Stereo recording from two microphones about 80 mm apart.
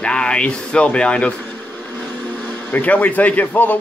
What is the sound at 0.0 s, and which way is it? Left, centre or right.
Speech, centre.